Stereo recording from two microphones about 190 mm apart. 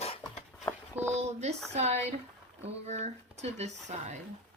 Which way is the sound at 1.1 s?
35° right (ahead or behind).